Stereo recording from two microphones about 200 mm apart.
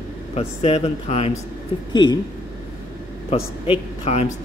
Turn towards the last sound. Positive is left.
turn(degrees=35)  # may be behind; listen again after turning